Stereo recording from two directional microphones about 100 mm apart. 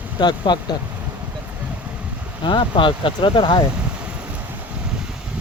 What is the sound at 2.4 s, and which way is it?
Speech, 55° left (ahead or behind).